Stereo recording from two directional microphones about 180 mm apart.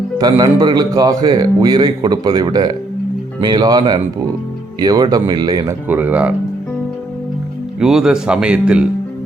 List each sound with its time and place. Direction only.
0.2 s a man's voice: 25° right (ahead or behind)
5.9 s speech: 10° right (ahead or behind)
7.8 s speech: 5° right (ahead or behind)